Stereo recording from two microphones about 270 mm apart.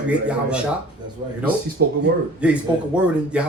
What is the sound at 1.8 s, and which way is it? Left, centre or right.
Speech, right.